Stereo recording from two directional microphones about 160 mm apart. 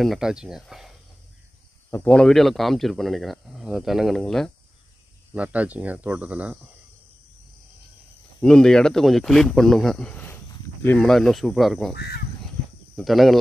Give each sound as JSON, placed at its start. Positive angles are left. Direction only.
{"t": 0.0, "sound": "speech", "side_deg": 0}
{"t": 1.9, "sound": "speech", "side_deg": 10}
{"t": 5.3, "sound": "speech", "side_deg": -10}
{"t": 8.4, "sound": "speech", "side_deg": 5}
{"t": 11.9, "sound": "speech", "side_deg": 85}
{"t": 12.9, "sound": "speech", "side_deg": 0}